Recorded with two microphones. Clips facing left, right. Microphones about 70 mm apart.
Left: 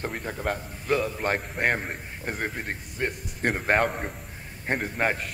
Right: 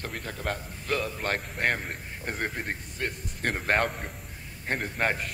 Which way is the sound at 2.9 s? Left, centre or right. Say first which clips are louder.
Left 3 dB; centre.